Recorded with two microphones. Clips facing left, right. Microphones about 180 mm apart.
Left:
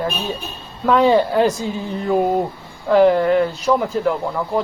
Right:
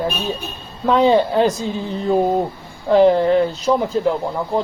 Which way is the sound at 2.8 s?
30° right (ahead or behind).